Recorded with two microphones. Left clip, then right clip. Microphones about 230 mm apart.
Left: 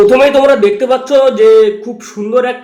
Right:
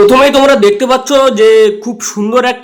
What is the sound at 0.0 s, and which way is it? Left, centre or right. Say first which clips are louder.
Speech: right 1 dB; right.